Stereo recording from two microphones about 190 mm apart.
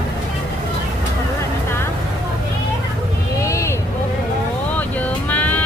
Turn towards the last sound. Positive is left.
turn(degrees=10)  # may be behind; listen again after turning